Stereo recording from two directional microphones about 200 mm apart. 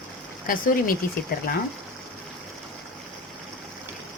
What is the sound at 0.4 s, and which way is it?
Speech, 45° left (ahead or behind).